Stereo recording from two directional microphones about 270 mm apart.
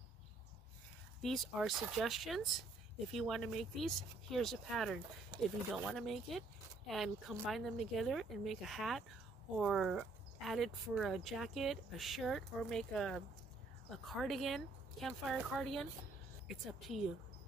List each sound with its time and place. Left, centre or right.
1.2 s speech: centre